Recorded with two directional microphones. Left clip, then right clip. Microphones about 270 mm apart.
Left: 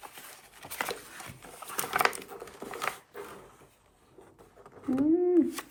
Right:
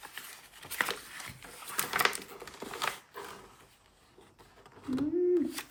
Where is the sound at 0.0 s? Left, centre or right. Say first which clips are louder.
Right 1 dB; centre.